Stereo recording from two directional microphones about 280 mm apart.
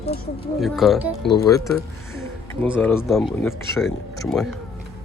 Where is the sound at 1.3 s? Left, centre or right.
Centre.